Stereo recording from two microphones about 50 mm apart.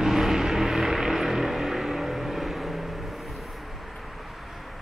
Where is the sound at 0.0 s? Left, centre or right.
Centre.